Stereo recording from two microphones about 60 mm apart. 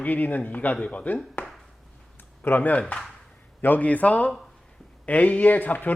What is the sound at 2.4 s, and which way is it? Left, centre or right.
Speech, left.